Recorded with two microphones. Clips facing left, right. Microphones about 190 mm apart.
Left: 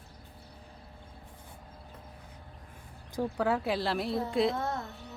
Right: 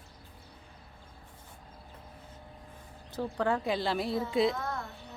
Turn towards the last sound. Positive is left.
turn(degrees=25)  # may be behind; listen again after turning